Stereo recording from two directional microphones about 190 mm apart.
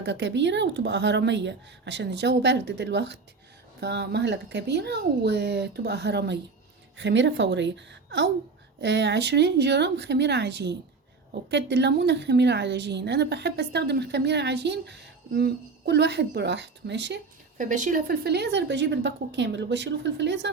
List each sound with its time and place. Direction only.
0.0 s a woman's voice: 70° right (ahead or behind)
8.8 s a woman's voice: 65° right (ahead or behind)
17.6 s a woman's voice: 40° right (ahead or behind); by 20.5 s 65° right (ahead or behind)